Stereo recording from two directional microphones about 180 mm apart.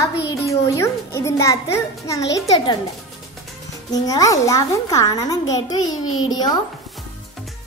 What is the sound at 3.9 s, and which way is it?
A child's voice, 20° left (ahead or behind).